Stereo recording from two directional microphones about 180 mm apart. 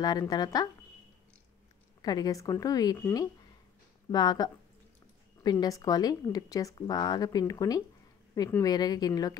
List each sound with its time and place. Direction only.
0.0 s speech: 20° left (ahead or behind)
2.0 s speech: 20° left (ahead or behind)